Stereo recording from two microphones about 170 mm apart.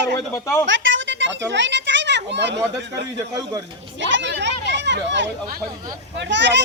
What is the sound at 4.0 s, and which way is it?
Speech, 90° right.